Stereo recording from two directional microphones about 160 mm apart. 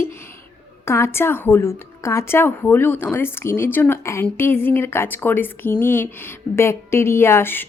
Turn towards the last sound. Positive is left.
turn(degrees=15)  # may be behind; listen again after turning